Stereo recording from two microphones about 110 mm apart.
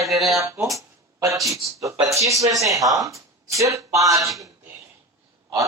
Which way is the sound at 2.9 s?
30° right (ahead or behind).